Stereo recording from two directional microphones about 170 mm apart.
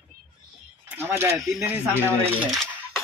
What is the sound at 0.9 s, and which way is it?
Speech, 15° right (ahead or behind).